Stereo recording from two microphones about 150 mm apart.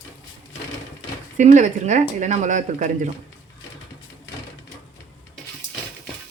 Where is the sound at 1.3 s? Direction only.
55° right (ahead or behind).